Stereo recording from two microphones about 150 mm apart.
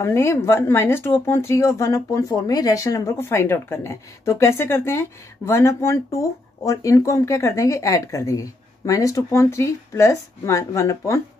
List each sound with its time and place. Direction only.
0.0 s speech: 20° left (ahead or behind)